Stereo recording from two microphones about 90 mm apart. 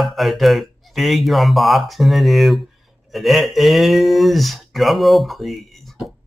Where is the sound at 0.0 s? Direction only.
Centre (ahead or behind).